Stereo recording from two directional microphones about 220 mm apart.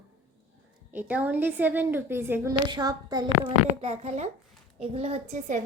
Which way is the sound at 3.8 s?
30° right (ahead or behind).